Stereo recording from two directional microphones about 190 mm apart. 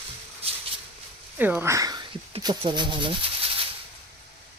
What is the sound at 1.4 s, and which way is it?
Speech, 10° right (ahead or behind).